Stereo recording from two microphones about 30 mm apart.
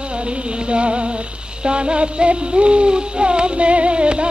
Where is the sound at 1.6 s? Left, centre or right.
Right.